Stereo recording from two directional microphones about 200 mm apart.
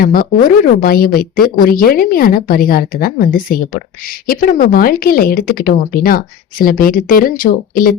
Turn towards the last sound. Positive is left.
turn(degrees=45)  # may be behind; listen again after turning